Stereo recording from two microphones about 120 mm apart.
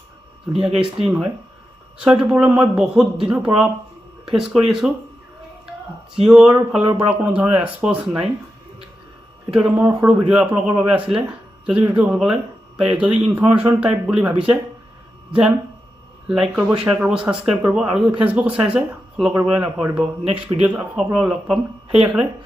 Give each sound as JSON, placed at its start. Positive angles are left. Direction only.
{"t": 0.5, "sound": "speech", "side_deg": -5}
{"t": 6.1, "sound": "speech", "side_deg": -5}
{"t": 9.5, "sound": "speech", "side_deg": -5}
{"t": 19.3, "sound": "speech", "side_deg": -25}
{"t": 19.8, "sound": "speech", "side_deg": -10}